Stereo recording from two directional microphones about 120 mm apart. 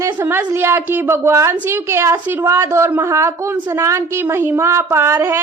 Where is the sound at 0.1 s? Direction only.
15° right (ahead or behind).